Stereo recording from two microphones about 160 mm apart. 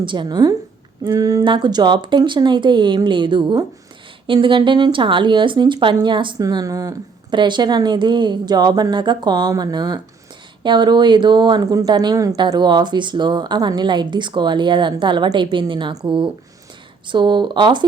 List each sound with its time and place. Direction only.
0.0 s speech: 30° right (ahead or behind)